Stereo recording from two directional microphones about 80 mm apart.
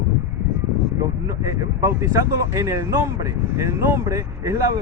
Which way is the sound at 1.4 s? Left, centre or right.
Right.